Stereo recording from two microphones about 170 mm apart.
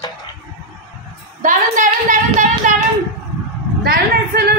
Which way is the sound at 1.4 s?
50° right (ahead or behind).